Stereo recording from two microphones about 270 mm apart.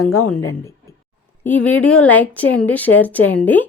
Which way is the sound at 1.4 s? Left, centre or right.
Centre.